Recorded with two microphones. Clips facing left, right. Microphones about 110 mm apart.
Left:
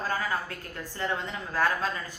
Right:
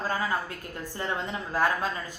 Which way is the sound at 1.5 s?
20° right (ahead or behind).